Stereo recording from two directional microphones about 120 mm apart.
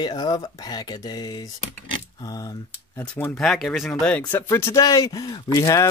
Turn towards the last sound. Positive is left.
turn(degrees=25)  # may be behind; listen again after turning